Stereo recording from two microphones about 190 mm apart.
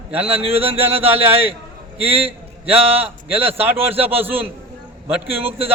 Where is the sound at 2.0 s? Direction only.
30° right (ahead or behind).